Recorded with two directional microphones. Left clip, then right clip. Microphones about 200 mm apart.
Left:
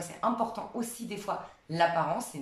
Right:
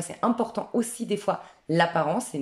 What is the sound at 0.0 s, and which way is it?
Speech, 45° right (ahead or behind).